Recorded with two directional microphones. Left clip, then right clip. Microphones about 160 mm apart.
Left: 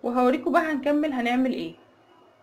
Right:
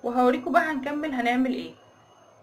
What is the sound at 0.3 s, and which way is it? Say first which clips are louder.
Speech: even; 50° left (ahead or behind).